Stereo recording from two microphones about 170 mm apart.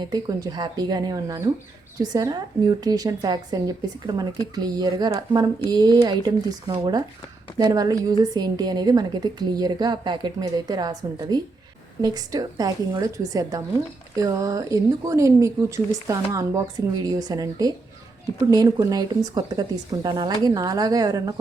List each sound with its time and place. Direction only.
0.0 s a woman's voice: 25° right (ahead or behind)